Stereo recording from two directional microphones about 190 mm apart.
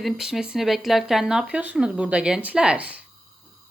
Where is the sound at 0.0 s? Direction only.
Centre (ahead or behind).